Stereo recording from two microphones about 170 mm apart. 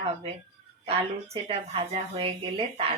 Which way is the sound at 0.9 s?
35° right (ahead or behind).